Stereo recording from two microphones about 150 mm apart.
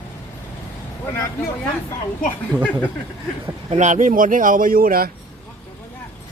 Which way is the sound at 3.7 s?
55° right (ahead or behind).